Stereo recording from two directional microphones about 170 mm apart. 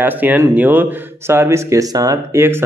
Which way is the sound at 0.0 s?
10° right (ahead or behind).